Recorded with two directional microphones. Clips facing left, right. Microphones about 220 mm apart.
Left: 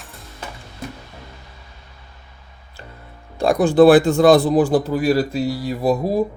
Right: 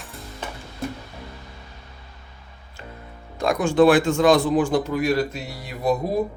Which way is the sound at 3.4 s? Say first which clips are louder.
Left 5 dB; 35° left (ahead or behind).